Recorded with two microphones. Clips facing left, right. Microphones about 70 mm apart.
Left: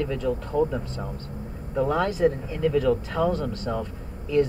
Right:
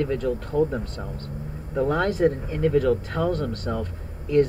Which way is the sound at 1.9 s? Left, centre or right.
Right.